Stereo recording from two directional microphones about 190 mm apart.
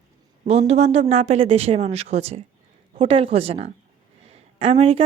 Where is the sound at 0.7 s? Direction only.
35° right (ahead or behind).